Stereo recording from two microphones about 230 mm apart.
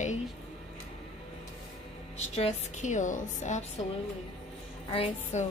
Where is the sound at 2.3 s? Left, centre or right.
Left.